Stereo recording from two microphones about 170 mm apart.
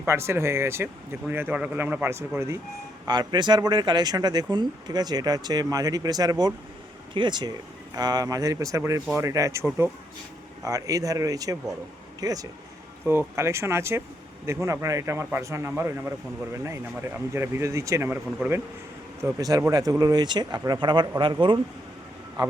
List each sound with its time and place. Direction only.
0.0 s speech: 15° right (ahead or behind)
3.1 s a man's voice: 25° right (ahead or behind)